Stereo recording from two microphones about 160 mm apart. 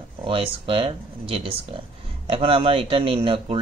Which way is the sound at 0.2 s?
35° right (ahead or behind).